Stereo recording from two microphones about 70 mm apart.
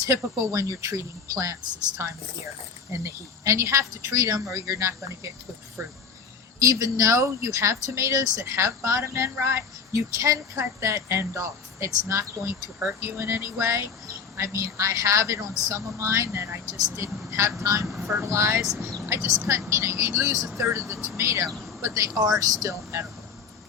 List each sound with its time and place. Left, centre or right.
0.1 s speech: right
6.6 s speech: right
13.0 s music: right
14.1 s speech: right
17.0 s music: right
17.6 s speech: right
17.8 s speech: centre
18.2 s music: right
19.0 s speech: right